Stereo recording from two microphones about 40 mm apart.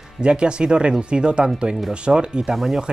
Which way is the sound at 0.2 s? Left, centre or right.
Right.